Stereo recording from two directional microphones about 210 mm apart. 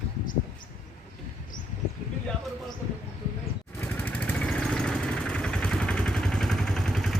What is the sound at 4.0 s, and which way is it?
Vehicle, 10° left (ahead or behind).